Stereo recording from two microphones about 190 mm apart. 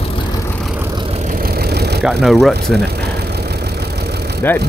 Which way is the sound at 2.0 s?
Centre (ahead or behind).